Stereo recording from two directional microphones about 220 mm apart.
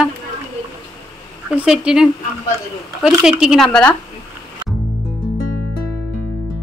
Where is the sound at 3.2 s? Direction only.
5° right (ahead or behind).